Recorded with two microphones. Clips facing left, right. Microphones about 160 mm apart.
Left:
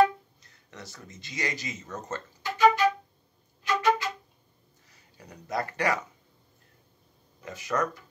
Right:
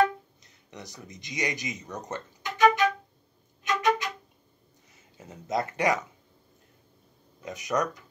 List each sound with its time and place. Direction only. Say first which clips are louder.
0.4 s speech: right 2 dB; 20° right (ahead or behind)
3.6 s violin: left 1 dB; 20° right (ahead or behind)
4.8 s speech: right 2 dB; 20° right (ahead or behind)
7.4 s speech: right 1 dB; 20° right (ahead or behind)